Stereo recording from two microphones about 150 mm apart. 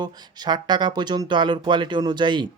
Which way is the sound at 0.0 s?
30° right (ahead or behind).